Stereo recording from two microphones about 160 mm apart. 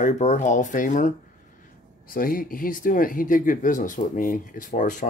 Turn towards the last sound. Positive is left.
turn(degrees=55)  # may be behind; listen again after turning